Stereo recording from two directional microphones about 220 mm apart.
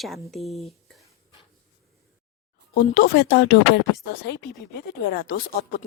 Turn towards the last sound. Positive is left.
turn(degrees=45)  # may be behind; listen again after turning